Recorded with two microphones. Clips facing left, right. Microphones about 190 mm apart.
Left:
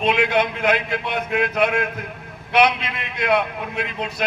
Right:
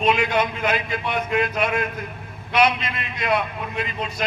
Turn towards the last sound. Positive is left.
turn(degrees=60)  # may be behind; listen again after turning